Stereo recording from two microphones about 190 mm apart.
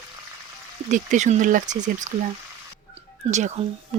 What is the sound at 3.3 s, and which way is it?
Speech, 40° right (ahead or behind).